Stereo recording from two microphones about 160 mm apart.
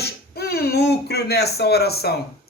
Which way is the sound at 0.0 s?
75° left (ahead or behind).